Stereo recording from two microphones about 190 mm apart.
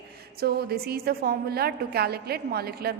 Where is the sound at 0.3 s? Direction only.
55° right (ahead or behind).